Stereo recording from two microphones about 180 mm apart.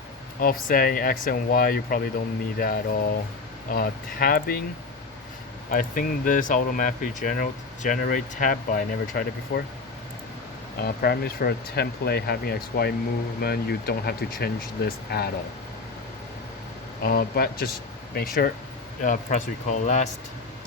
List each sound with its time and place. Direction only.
0.3 s speech: 50° left (ahead or behind)
5.7 s speech: 50° left (ahead or behind)
10.8 s speech: 60° left (ahead or behind)
17.0 s speech: 55° left (ahead or behind)
19.0 s speech: 45° left (ahead or behind)